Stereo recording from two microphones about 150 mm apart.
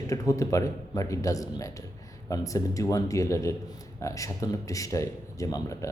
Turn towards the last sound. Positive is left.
turn(degrees=20)  # may be behind; listen again after turning